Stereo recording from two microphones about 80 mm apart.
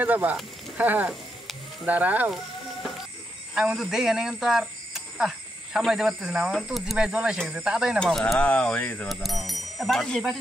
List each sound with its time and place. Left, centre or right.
0.0 s speech: centre
3.5 s speech: centre
7.1 s speech: centre
8.0 s speech: centre
8.4 s speech: centre
9.1 s speech: centre